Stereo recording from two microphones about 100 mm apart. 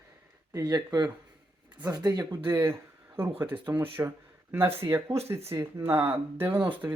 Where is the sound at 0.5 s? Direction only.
40° right (ahead or behind).